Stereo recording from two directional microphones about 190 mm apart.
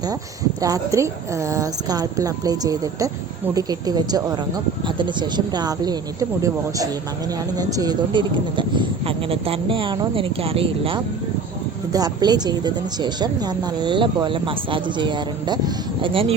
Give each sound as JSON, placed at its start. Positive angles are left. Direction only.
{"t": 0.6, "sound": "speech", "side_deg": -15}